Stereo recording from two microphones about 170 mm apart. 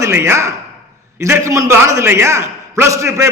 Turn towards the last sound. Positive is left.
turn(degrees=-15)  # may be behind; listen again after turning